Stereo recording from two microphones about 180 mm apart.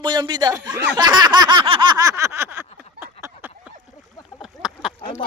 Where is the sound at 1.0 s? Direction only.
25° right (ahead or behind).